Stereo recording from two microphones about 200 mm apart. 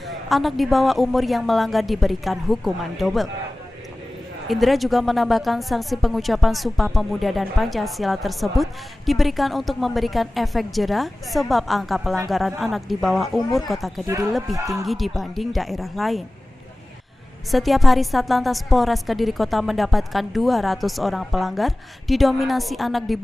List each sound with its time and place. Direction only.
0.3 s a woman's voice: centre (ahead or behind)
4.5 s a woman's voice: centre (ahead or behind)
14.0 s speech: 15° right (ahead or behind)
14.8 s a woman's voice: centre (ahead or behind)
17.5 s a woman's voice: centre (ahead or behind)